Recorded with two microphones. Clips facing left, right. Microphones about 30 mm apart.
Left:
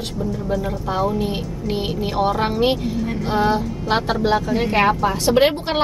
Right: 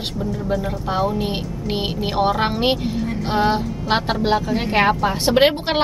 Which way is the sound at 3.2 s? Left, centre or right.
Right.